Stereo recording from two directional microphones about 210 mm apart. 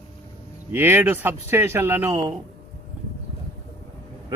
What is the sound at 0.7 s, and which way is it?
Speech, 10° right (ahead or behind).